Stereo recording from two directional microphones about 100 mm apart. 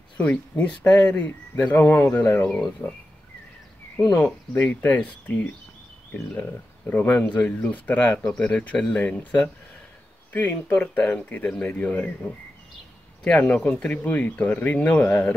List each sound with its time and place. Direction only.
0.2 s speech: 15° left (ahead or behind)
4.1 s speech: 15° left (ahead or behind)
6.9 s speech: 15° left (ahead or behind)
10.3 s speech: 15° left (ahead or behind)